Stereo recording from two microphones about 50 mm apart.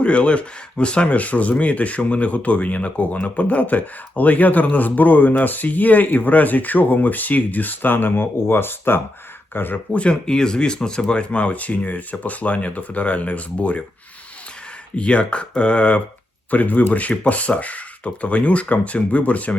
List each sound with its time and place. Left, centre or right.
0.0 s speech: left
9.9 s speech: left
14.9 s speech: left
16.5 s speech: left